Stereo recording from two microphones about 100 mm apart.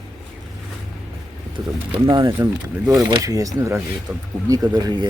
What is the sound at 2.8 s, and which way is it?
Speech, 5° right (ahead or behind).